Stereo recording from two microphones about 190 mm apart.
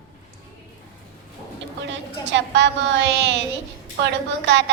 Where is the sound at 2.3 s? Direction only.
65° right (ahead or behind).